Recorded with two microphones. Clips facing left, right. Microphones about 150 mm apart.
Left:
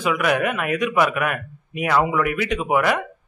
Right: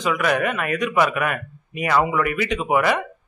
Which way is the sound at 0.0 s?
5° left (ahead or behind).